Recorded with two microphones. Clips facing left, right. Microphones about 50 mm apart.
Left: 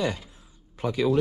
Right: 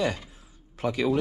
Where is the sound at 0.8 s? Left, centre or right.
Right.